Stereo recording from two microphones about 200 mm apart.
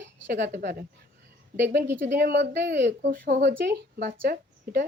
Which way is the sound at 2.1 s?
60° right (ahead or behind).